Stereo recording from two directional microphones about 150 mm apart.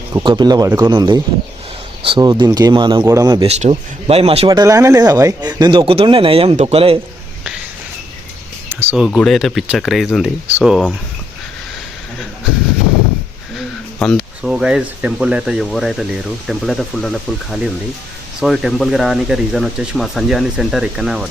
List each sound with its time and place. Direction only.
0.1 s speech: 30° right (ahead or behind)
3.4 s speech: 40° right (ahead or behind)
4.4 s a man's voice: 25° right (ahead or behind)
8.7 s speech: 10° right (ahead or behind)
9.0 s speech: centre (ahead or behind)
14.0 s speech: 5° left (ahead or behind)
14.4 s speech: 5° right (ahead or behind)